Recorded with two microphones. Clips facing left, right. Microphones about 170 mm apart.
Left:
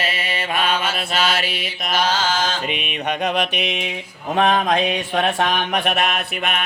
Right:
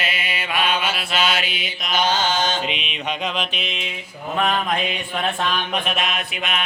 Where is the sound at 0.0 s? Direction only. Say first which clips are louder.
Left 3 dB; 35° left (ahead or behind).